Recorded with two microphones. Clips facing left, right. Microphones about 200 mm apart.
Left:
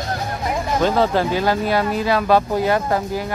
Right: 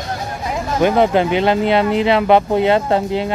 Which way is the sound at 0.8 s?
20° right (ahead or behind).